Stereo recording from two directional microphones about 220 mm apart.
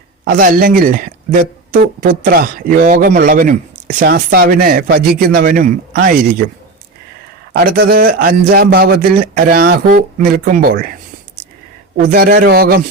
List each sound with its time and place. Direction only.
0.3 s speech: 40° right (ahead or behind)
7.5 s speech: 45° right (ahead or behind)
11.9 s speech: 40° right (ahead or behind)